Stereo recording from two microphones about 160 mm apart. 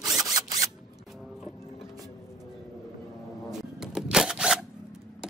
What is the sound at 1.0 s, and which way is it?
Music, centre (ahead or behind).